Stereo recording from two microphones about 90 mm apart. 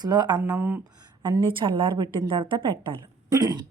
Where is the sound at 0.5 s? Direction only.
20° right (ahead or behind).